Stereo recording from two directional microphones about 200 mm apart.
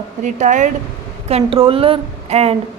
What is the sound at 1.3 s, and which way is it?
A woman's voice, 30° right (ahead or behind).